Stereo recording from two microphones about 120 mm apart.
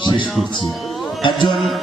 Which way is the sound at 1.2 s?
40° left (ahead or behind).